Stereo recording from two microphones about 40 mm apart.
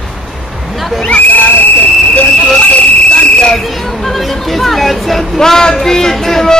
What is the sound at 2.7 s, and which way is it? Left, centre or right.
Cricket, left.